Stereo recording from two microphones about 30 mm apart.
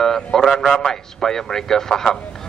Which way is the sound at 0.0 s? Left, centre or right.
Centre.